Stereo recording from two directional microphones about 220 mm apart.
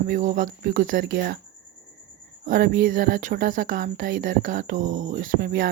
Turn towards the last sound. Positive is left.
turn(degrees=-45)  # may be behind; listen again after turning